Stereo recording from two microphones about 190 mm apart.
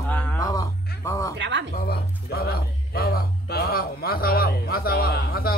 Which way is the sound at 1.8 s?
55° left (ahead or behind).